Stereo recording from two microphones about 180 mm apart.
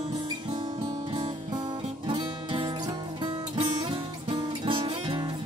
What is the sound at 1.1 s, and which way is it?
Music, 25° right (ahead or behind).